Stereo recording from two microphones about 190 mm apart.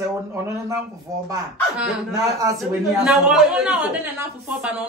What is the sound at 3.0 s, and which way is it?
A woman's voice, 5° right (ahead or behind).